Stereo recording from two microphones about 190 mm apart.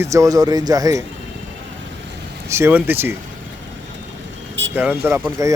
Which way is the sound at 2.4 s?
15° right (ahead or behind).